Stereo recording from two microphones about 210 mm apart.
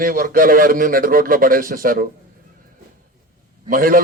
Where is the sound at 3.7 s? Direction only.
40° right (ahead or behind).